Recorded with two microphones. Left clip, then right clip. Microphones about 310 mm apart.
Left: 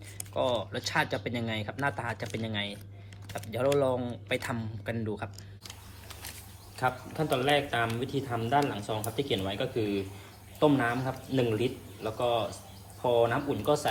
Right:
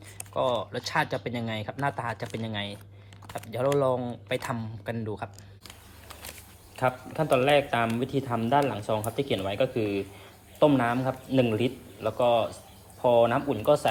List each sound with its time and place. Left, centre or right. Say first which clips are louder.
0.7 s a man's voice: right 2 dB; centre